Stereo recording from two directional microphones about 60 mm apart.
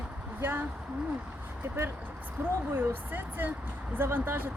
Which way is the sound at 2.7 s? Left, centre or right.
Right.